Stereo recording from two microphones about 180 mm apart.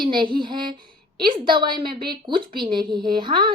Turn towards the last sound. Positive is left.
turn(degrees=-25)  # may be behind; listen again after turning